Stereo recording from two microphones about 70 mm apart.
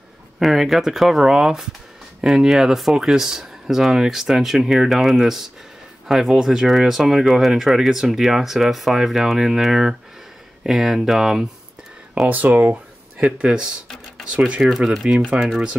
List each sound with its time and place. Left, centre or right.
0.4 s speech: centre
12.3 s speech: right
12.7 s speech: centre
15.0 s speech: centre